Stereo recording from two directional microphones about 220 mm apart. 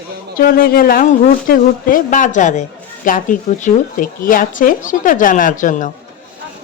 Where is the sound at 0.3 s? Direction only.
40° left (ahead or behind).